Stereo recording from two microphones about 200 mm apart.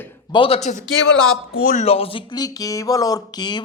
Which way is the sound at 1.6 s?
35° left (ahead or behind).